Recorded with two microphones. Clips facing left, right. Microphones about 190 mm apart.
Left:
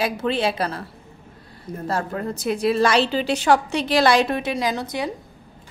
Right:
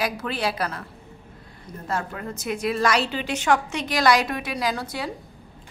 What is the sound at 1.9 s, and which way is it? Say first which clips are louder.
A woman's voice: left 4 dB; 35° left (ahead or behind).